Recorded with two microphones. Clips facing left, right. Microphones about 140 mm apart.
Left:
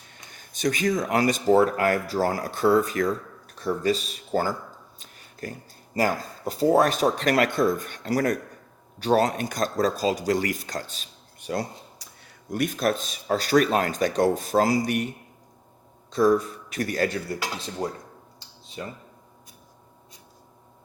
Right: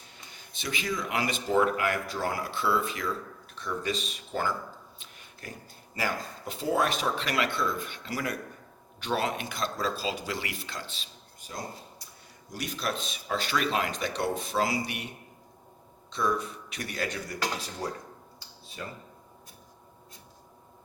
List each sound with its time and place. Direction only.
0.3 s speech: 45° left (ahead or behind)
11.3 s speech: 70° left (ahead or behind); by 15.1 s 45° left (ahead or behind)
16.1 s speech: 40° left (ahead or behind)
17.8 s speech: 25° left (ahead or behind)